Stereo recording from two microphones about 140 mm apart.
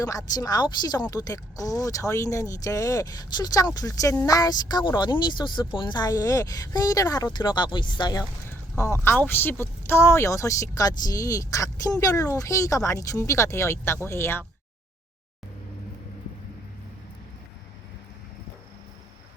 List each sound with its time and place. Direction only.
0.0 s speech: 25° left (ahead or behind)
8.4 s speech: 20° left (ahead or behind)